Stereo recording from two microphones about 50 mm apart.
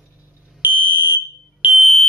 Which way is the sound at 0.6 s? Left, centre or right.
Right.